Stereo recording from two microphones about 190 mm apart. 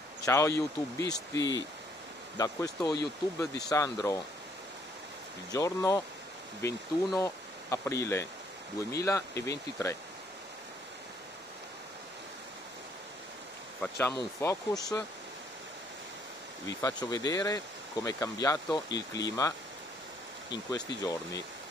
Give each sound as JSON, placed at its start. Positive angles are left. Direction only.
{"t": 0.2, "sound": "speech", "side_deg": 15}
{"t": 5.5, "sound": "speech", "side_deg": 15}
{"t": 13.9, "sound": "speech", "side_deg": 15}
{"t": 16.6, "sound": "speech", "side_deg": 20}
{"t": 20.7, "sound": "speech", "side_deg": 20}